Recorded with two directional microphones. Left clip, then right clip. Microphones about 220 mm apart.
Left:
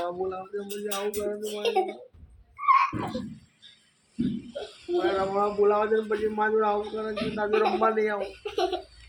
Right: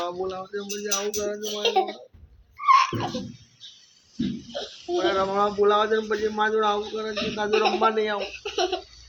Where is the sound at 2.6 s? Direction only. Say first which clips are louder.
Right 3 dB; 20° right (ahead or behind).